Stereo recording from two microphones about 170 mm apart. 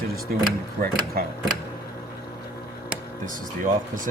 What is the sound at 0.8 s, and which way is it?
Speech, 60° right (ahead or behind).